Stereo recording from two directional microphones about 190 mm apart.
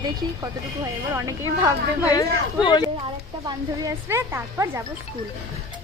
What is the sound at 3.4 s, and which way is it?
Speech, 15° right (ahead or behind).